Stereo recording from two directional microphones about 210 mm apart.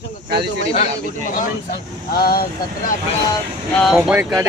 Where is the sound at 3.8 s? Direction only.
Centre (ahead or behind).